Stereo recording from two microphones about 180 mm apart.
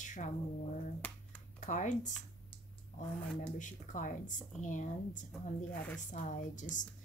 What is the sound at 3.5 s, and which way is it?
A woman's voice, 45° left (ahead or behind).